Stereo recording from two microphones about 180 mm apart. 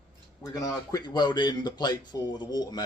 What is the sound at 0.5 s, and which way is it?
Speech, 20° left (ahead or behind).